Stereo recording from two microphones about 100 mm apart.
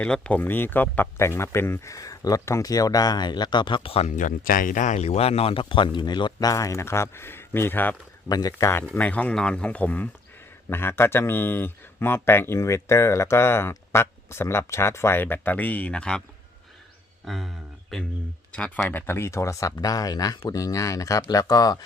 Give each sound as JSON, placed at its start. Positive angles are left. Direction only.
{"t": 0.0, "sound": "speech", "side_deg": 15}
{"t": 5.0, "sound": "speech", "side_deg": 90}
{"t": 6.5, "sound": "speech", "side_deg": 35}
{"t": 8.3, "sound": "speech", "side_deg": 40}
{"t": 8.9, "sound": "speech", "side_deg": 15}
{"t": 17.2, "sound": "speech", "side_deg": 0}
{"t": 18.9, "sound": "speech", "side_deg": 20}